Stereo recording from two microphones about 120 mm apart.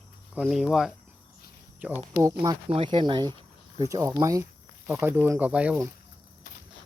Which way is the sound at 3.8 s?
25° right (ahead or behind).